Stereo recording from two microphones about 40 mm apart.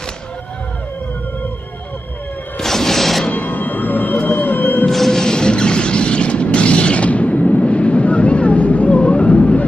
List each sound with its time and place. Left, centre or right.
2.6 s music: centre
3.3 s music: left
4.2 s music: left
4.8 s a sound: centre; by 9.7 s left